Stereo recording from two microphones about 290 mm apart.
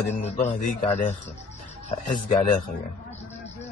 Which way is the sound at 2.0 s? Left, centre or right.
Left.